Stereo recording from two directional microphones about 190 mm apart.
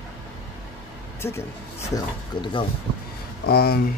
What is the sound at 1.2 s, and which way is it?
Speech, 15° left (ahead or behind).